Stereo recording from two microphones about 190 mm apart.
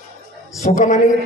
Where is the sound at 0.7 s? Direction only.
40° left (ahead or behind).